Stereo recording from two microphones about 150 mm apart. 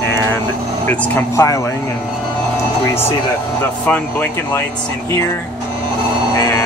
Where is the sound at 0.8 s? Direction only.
20° left (ahead or behind).